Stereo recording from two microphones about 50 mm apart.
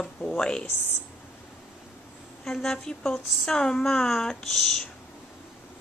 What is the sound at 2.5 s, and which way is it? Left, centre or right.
Speech, centre.